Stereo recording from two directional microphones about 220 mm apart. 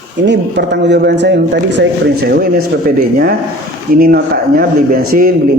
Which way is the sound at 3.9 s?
40° right (ahead or behind).